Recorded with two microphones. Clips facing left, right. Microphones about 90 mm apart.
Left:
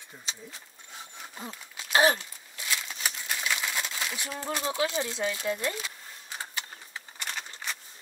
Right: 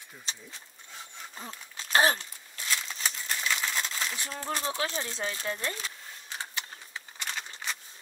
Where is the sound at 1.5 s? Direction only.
40° right (ahead or behind).